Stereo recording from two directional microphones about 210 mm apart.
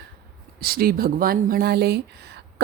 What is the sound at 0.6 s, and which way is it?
Speech, 45° right (ahead or behind).